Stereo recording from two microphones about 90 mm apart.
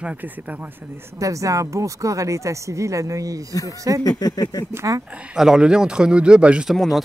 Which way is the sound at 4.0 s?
45° left (ahead or behind).